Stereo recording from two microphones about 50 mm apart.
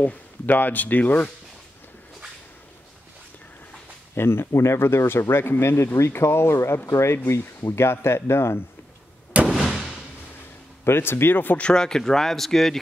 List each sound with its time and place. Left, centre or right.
0.0 s a man's voice: left
4.1 s speech: left
9.5 s fireworks: centre
10.8 s speech: left
11.7 s speech: centre